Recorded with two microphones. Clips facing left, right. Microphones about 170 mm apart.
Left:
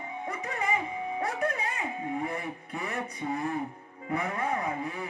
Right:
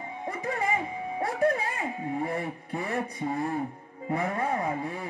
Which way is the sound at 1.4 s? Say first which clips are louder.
Right 5 dB; 30° right (ahead or behind).